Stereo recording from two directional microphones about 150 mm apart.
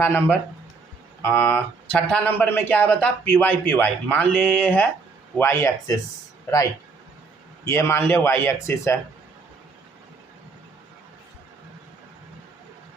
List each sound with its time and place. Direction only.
0.0 s speech: 15° left (ahead or behind)
7.6 s speech: 15° left (ahead or behind)